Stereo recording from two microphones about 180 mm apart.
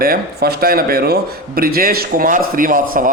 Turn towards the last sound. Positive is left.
turn(degrees=-50)  # may be behind; listen again after turning